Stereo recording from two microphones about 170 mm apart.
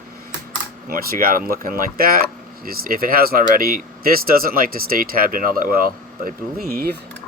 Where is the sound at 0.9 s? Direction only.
55° right (ahead or behind).